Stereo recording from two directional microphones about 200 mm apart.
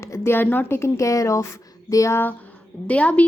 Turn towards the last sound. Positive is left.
turn(degrees=5)  # may be behind; listen again after turning